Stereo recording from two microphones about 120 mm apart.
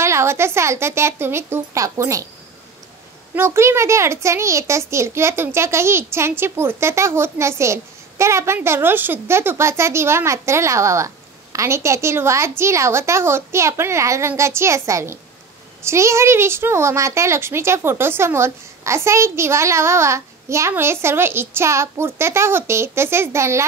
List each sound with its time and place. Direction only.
0.0 s speech: 20° right (ahead or behind)
3.3 s speech: 20° right (ahead or behind)